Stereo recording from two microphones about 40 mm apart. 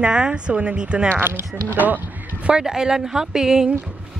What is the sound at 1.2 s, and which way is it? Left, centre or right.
Speech, right.